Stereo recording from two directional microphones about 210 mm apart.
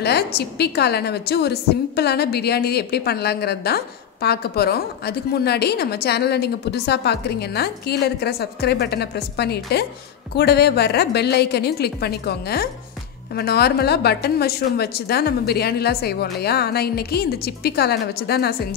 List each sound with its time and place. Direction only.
0.0 s a woman's voice: 50° left (ahead or behind)